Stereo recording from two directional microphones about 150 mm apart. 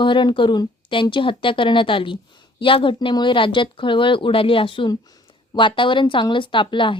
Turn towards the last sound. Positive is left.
turn(degrees=35)  # may be behind; listen again after turning